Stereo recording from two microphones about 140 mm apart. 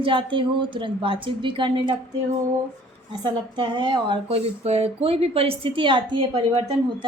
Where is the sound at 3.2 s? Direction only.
35° right (ahead or behind).